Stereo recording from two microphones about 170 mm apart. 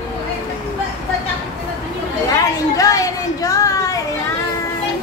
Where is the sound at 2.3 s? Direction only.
20° left (ahead or behind).